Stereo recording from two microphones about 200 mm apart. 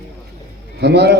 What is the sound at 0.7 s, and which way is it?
Speech, 55° right (ahead or behind).